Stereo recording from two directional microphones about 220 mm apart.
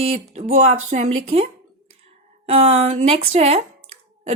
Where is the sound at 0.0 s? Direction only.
30° right (ahead or behind).